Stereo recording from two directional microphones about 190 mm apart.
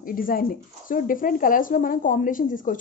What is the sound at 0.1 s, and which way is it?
Speech, 50° left (ahead or behind).